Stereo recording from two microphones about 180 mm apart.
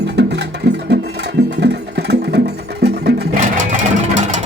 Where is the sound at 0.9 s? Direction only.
65° right (ahead or behind).